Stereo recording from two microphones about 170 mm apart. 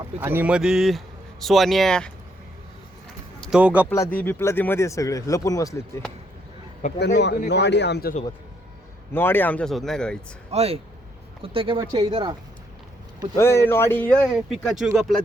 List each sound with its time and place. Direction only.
0.2 s speech: 10° right (ahead or behind); by 2.1 s 5° left (ahead or behind)
3.4 s speech: 5° right (ahead or behind)
3.8 s speech: 15° left (ahead or behind)
7.0 s a man's voice: 85° left
9.1 s speech: 10° left (ahead or behind)
10.5 s speech: 40° right (ahead or behind)
13.3 s speech: 15° left (ahead or behind)
14.3 s speech: centre (ahead or behind)